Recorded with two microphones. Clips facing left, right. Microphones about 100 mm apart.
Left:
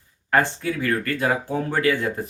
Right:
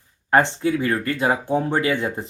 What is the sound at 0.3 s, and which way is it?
Speech, 25° right (ahead or behind).